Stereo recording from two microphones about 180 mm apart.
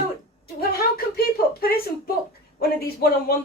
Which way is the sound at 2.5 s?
55° left (ahead or behind).